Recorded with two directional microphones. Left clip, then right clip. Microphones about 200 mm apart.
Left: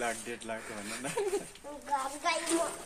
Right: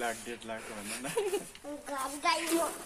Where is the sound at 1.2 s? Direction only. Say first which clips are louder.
Right 1 dB; centre (ahead or behind).